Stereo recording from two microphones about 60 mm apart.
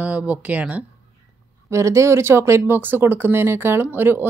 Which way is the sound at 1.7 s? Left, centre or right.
Right.